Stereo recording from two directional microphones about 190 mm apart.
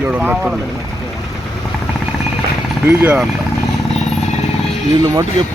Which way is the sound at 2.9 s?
10° right (ahead or behind).